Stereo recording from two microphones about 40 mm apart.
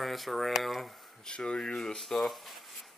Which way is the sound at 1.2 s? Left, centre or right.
Left.